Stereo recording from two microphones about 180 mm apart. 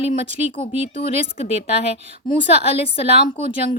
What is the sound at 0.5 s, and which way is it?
A woman's voice, 30° left (ahead or behind).